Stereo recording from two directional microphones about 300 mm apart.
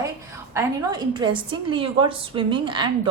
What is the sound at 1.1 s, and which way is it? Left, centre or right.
A woman's voice, centre.